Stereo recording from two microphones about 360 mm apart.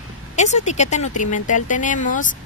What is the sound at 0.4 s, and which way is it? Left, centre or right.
Speech, centre.